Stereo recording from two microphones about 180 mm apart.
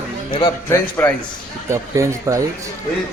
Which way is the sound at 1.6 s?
15° right (ahead or behind).